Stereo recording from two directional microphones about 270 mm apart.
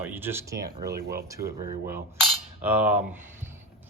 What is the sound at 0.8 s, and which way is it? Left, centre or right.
Speech, right.